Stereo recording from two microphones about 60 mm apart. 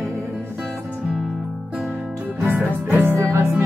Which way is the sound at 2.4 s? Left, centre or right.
Right.